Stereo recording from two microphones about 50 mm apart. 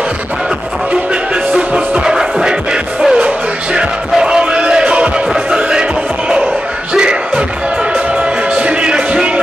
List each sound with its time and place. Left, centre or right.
1.3 s music: right
6.9 s a sound: centre
8.2 s music: right